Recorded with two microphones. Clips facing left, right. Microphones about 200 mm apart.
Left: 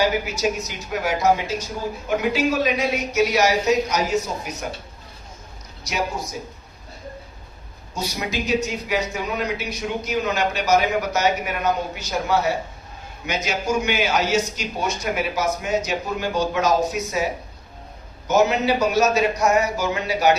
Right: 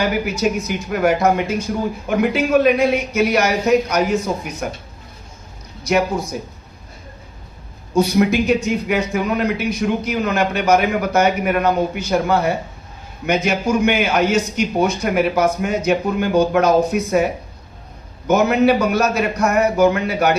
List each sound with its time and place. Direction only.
0.0 s a man's voice: 55° right (ahead or behind)
7.9 s a man's voice: 55° right (ahead or behind)